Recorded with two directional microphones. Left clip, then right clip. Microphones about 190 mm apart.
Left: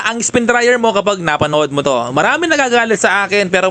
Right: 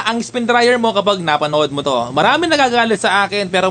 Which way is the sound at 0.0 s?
30° left (ahead or behind).